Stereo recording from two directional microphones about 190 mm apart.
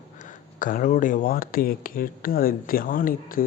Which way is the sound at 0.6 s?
45° left (ahead or behind).